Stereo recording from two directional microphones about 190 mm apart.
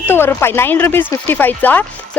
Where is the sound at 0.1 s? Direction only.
10° left (ahead or behind).